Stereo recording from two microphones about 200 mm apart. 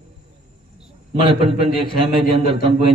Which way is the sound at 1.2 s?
25° right (ahead or behind).